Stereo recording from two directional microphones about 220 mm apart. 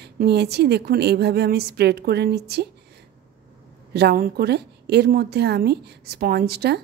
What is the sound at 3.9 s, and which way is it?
A woman's voice, 45° right (ahead or behind).